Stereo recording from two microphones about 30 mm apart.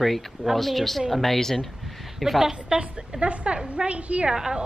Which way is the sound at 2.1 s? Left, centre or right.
Centre.